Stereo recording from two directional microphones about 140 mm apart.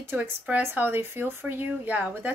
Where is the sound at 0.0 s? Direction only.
10° right (ahead or behind).